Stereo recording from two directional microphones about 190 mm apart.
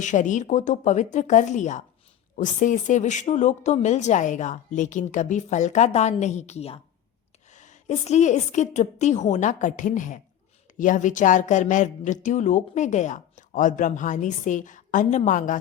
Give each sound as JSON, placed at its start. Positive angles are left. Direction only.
{"t": 0.0, "sound": "speech", "side_deg": 40}